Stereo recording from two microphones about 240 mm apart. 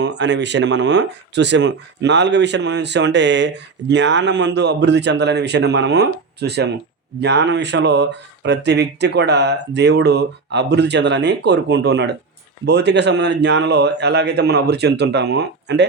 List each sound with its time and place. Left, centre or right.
0.0 s speech: right